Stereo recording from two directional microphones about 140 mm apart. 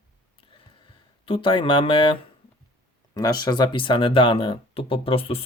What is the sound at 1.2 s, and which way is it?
Speech, 40° left (ahead or behind).